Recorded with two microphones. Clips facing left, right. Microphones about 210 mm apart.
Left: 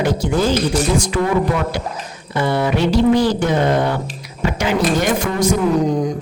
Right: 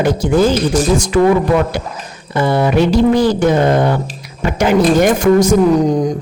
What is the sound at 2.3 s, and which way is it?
Speech, 45° right (ahead or behind).